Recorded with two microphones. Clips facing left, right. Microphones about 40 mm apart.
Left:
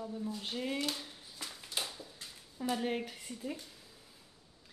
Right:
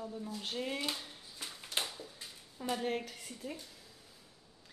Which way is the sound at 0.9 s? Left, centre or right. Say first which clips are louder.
Even; centre.